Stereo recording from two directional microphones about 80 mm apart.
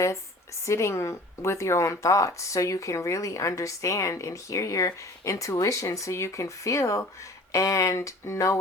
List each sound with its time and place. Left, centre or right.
0.6 s a woman's voice: left